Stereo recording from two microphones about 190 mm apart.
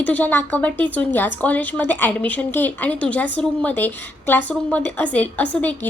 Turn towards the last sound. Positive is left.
turn(degrees=10)  # may be behind; listen again after turning